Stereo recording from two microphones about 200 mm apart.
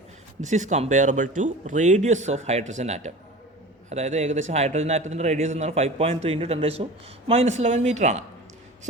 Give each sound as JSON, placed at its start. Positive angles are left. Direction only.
{"t": 0.4, "sound": "speech", "side_deg": -35}